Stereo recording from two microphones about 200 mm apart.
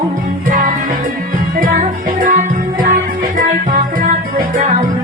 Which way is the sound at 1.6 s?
40° right (ahead or behind).